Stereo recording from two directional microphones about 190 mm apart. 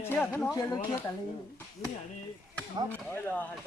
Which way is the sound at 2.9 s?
10° left (ahead or behind).